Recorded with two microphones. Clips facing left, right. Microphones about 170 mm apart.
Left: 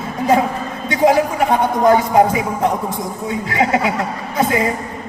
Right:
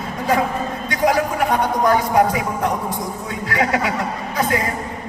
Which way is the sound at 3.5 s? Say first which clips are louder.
Left 2 dB; 25° left (ahead or behind).